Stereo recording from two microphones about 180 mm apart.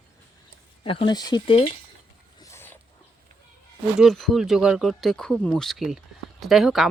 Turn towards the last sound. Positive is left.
turn(degrees=0)  # may be behind; listen again after turning